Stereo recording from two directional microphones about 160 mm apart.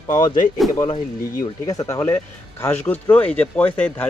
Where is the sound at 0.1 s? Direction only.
25° left (ahead or behind).